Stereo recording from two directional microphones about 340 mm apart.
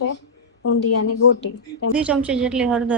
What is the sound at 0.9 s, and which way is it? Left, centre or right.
Speech, left.